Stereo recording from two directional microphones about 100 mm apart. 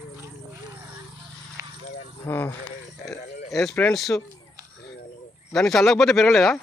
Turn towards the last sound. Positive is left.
turn(degrees=0)  # may be behind; listen again after turning